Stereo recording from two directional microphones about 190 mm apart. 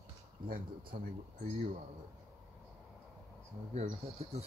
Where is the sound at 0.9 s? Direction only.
50° right (ahead or behind).